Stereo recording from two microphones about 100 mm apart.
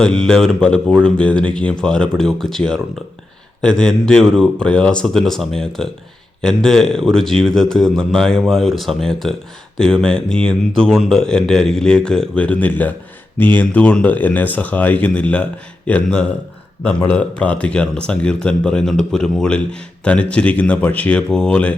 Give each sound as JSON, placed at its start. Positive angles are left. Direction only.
{"t": 0.0, "sound": "speech", "side_deg": 10}